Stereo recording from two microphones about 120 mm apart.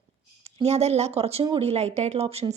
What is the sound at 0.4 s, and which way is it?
Speech, 65° right (ahead or behind).